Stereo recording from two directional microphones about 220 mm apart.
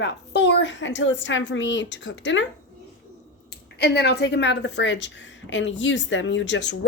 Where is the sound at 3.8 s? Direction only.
45° left (ahead or behind).